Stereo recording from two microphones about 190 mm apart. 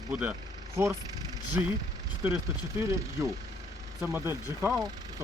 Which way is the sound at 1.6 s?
10° right (ahead or behind).